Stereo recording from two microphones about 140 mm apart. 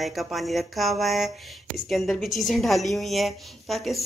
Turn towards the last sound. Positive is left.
turn(degrees=0)  # may be behind; listen again after turning